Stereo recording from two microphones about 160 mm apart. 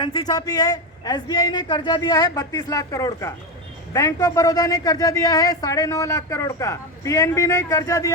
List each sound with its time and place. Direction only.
0.0 s speech: 30° left (ahead or behind)